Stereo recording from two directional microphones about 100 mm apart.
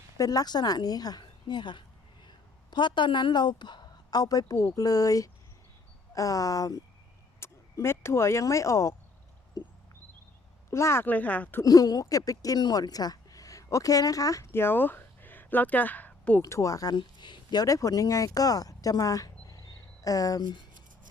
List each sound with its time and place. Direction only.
0.2 s a woman's voice: 35° left (ahead or behind)
7.3 s speech: 25° left (ahead or behind)
9.6 s a sound: 40° left (ahead or behind)
10.7 s speech: 25° left (ahead or behind)
11.6 s speech: 40° left (ahead or behind)
14.5 s speech: 20° left (ahead or behind)
16.4 s speech: 30° left (ahead or behind); by 20.7 s 45° left (ahead or behind)